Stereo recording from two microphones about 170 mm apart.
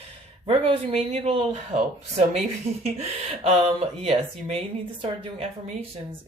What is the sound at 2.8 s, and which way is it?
Speech, 35° right (ahead or behind).